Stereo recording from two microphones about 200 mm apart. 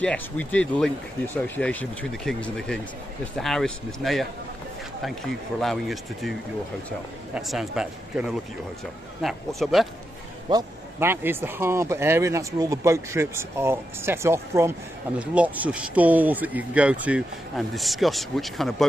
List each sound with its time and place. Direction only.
0.0 s speech: 5° left (ahead or behind)
7.3 s speech: centre (ahead or behind)
10.5 s speech: 15° right (ahead or behind); by 18.9 s centre (ahead or behind)